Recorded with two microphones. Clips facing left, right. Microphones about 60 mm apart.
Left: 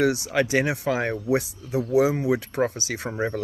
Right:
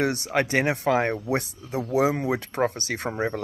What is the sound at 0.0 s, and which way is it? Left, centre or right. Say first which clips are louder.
Speech: left 2 dB; right.